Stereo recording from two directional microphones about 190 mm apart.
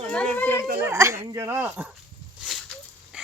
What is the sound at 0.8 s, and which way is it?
Speech, 15° right (ahead or behind).